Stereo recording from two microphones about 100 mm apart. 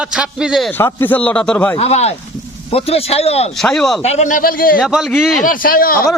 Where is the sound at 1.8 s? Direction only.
90° left.